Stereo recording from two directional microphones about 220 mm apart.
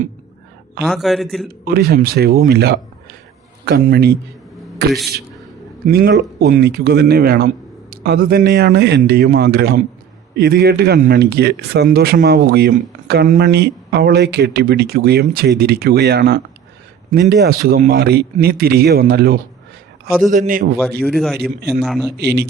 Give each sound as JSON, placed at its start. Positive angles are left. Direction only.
{"t": 0.9, "sound": "a man's voice", "side_deg": 0}
{"t": 1.6, "sound": "speech", "side_deg": -45}
{"t": 4.9, "sound": "a man's voice", "side_deg": 0}
{"t": 5.9, "sound": "a man's voice", "side_deg": -45}
{"t": 21.0, "sound": "a man's voice", "side_deg": 0}
{"t": 21.3, "sound": "speech", "side_deg": -45}
{"t": 21.8, "sound": "a man's voice", "side_deg": 0}
{"t": 22.2, "sound": "speech", "side_deg": -45}